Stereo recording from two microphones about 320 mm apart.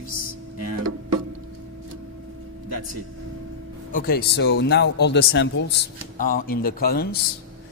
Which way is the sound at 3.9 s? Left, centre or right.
Left.